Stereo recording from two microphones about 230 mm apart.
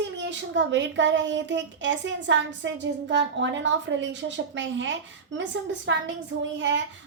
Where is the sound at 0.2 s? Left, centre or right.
Right.